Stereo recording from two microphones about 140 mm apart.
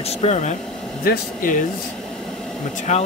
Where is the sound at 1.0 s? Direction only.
85° left.